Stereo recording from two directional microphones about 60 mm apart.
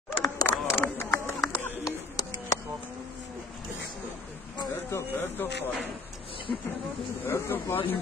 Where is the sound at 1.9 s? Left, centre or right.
Left.